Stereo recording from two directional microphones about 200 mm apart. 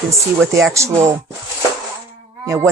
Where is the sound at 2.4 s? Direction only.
15° right (ahead or behind).